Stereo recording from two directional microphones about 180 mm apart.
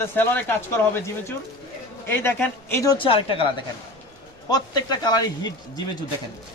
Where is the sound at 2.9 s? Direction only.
30° left (ahead or behind).